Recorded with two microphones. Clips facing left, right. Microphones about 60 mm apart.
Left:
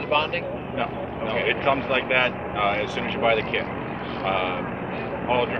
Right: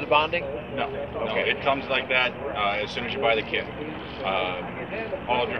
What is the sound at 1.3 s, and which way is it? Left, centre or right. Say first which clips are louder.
Speech: left 3 dB; centre.